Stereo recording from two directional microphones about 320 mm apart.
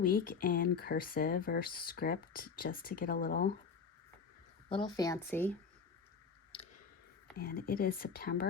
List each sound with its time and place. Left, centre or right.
0.0 s speech: left
4.7 s speech: centre
7.3 s speech: left